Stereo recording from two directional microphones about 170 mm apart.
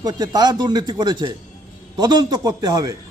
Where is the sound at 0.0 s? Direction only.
20° right (ahead or behind).